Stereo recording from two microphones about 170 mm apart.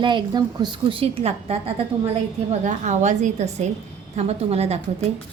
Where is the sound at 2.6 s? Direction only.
45° right (ahead or behind).